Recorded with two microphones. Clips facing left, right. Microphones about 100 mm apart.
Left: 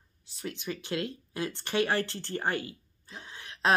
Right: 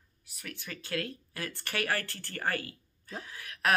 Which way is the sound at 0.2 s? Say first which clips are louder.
Left 7 dB; 30° left (ahead or behind).